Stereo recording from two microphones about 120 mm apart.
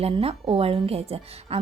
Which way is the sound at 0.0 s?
55° right (ahead or behind).